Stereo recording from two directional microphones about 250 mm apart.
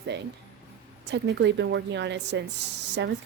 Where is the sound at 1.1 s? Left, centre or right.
Right.